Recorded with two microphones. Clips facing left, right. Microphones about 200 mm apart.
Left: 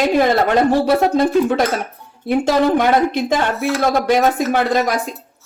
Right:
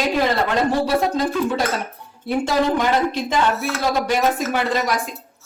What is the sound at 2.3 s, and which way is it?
Speech, 60° left (ahead or behind).